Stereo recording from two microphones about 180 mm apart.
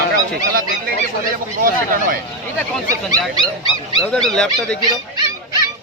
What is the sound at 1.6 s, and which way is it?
Speech, 55° right (ahead or behind).